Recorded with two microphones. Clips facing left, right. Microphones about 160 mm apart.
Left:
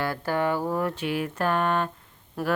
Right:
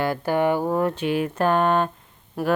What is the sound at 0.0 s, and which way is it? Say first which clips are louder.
A woman's voice: right 5 dB; 20° right (ahead or behind).